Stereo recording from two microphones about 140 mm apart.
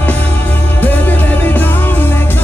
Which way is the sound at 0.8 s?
15° left (ahead or behind).